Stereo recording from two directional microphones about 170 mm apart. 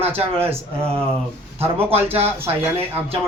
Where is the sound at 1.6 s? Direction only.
35° right (ahead or behind).